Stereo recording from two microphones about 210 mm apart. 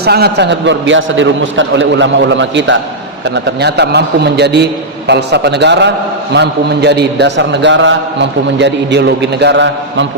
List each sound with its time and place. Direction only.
0.0 s a man's voice: 50° right (ahead or behind)